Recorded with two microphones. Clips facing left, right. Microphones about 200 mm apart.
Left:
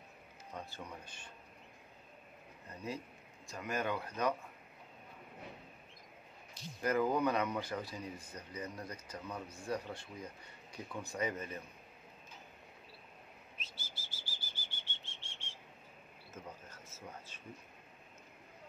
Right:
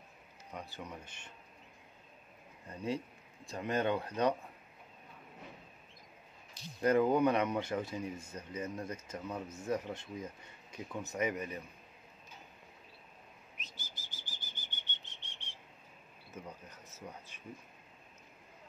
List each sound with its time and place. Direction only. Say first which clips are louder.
0.6 s speech: right 2 dB; 15° right (ahead or behind)
3.4 s speech: right 5 dB; 30° right (ahead or behind)
6.8 s speech: right 4 dB; 25° right (ahead or behind)
13.6 s chirp: right 1 dB; 15° right (ahead or behind)
16.3 s a sound: right 2 dB; 15° right (ahead or behind)